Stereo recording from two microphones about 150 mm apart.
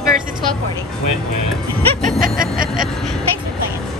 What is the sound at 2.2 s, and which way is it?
Snicker, 65° right (ahead or behind).